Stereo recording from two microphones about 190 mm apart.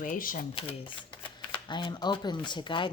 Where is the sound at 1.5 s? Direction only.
25° left (ahead or behind).